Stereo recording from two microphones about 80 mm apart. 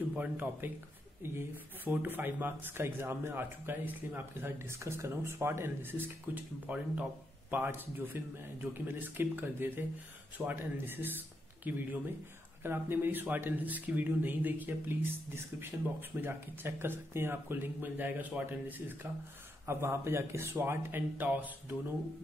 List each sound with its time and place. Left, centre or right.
0.1 s a man's voice: centre